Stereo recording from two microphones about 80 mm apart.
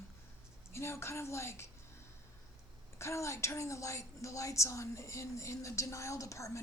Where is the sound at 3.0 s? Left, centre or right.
Left.